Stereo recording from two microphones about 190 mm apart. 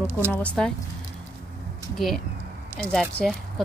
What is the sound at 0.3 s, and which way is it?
Speech, 5° left (ahead or behind).